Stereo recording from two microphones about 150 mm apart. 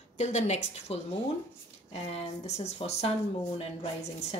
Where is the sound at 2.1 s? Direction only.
45° left (ahead or behind).